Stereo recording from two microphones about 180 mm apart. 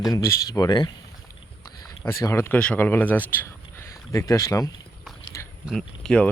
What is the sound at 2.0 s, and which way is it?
Speech, 15° left (ahead or behind).